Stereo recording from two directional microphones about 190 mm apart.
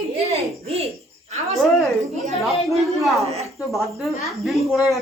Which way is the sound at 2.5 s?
Centre (ahead or behind).